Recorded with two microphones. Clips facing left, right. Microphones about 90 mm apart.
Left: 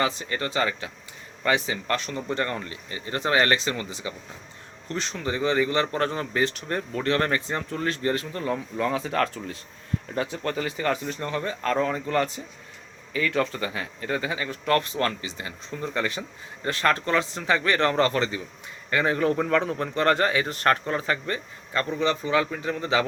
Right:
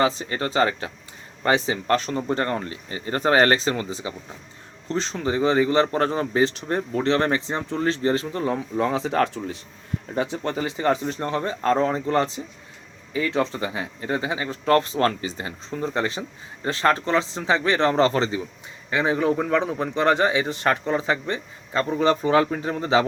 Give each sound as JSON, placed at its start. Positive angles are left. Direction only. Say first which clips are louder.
{"t": 0.0, "sound": "speech", "louder": "right 4 dB", "side_deg": -30}
{"t": 18.9, "sound": "a man's voice", "louder": "right 2 dB", "side_deg": -15}
{"t": 21.9, "sound": "speech", "louder": "right 5 dB", "side_deg": -40}